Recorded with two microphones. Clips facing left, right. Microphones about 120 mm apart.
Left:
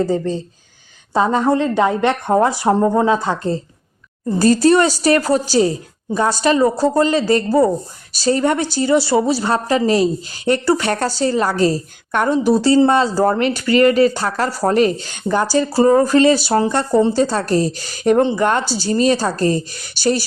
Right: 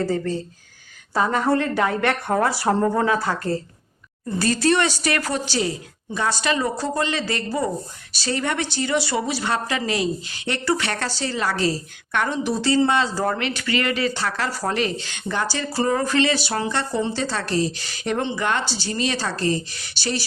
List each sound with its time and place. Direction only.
0.0 s a woman's voice: 20° left (ahead or behind)
4.3 s speech: 40° left (ahead or behind)